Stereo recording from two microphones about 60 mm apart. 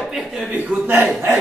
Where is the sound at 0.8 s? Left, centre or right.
Right.